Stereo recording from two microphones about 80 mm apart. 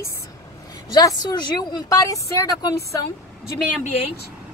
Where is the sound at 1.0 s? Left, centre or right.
Left.